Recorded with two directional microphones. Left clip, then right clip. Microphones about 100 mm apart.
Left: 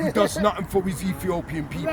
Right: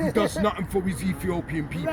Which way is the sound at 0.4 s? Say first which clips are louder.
Left 3 dB; 45° left (ahead or behind).